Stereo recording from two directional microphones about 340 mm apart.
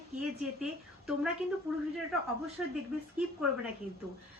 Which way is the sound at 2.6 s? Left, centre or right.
Centre.